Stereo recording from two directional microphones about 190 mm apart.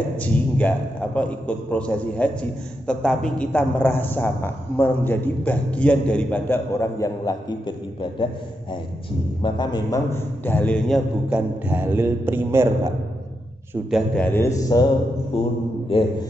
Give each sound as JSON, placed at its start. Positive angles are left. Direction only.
{"t": 0.2, "sound": "a man's voice", "side_deg": 10}
{"t": 9.4, "sound": "a man's voice", "side_deg": 20}
{"t": 11.2, "sound": "a man's voice", "side_deg": -5}
{"t": 13.8, "sound": "a man's voice", "side_deg": 0}
{"t": 15.9, "sound": "speech", "side_deg": 25}